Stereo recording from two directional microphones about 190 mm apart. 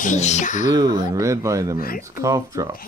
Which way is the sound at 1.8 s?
50° left (ahead or behind).